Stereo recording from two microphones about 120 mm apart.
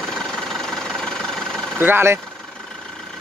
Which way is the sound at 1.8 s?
20° right (ahead or behind).